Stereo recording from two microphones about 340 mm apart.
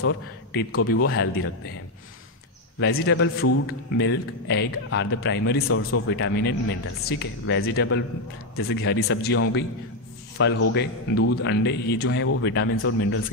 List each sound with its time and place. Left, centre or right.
0.0 s speech: left
2.8 s speech: left
10.7 s speech: left